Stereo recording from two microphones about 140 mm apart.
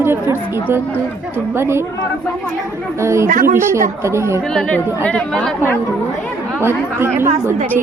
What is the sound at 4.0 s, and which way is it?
Speech, 20° right (ahead or behind).